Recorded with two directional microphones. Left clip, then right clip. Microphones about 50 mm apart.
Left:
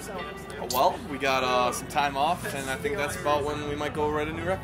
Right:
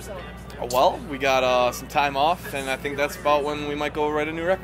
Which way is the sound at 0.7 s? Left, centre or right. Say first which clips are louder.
Right 4 dB; right.